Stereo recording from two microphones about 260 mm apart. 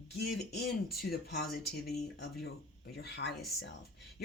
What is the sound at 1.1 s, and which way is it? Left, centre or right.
Speech, left.